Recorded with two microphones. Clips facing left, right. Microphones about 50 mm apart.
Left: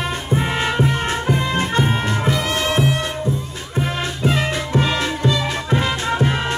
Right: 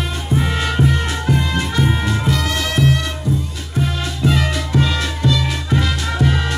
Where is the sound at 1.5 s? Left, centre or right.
Left.